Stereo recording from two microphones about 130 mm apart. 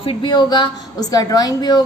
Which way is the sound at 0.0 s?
40° left (ahead or behind).